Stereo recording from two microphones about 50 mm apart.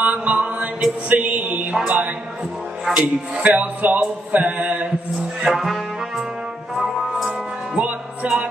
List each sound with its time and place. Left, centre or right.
0.0 s music: right
1.9 s mantra: right
3.0 s music: right
4.0 s mantra: right
5.4 s brass instrument: centre
7.7 s music: right